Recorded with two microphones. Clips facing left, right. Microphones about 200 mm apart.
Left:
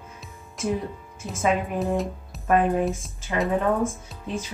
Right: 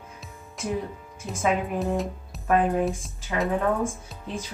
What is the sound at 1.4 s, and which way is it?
A woman's voice, centre (ahead or behind).